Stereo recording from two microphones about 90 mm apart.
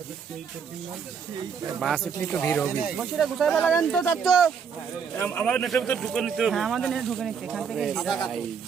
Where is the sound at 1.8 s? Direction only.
Centre (ahead or behind).